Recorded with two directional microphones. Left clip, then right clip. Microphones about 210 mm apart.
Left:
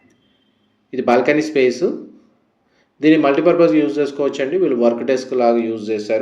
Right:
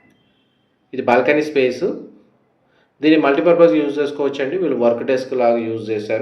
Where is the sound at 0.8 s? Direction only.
30° left (ahead or behind).